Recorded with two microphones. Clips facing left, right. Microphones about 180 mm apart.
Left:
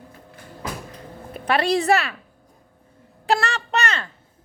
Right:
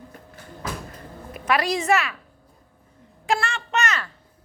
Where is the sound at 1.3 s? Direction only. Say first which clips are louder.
Left 3 dB; 30° left (ahead or behind).